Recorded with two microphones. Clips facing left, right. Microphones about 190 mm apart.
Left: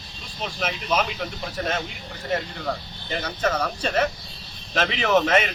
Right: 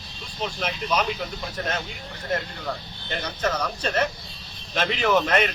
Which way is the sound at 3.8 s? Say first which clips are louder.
Left 1 dB; 10° left (ahead or behind).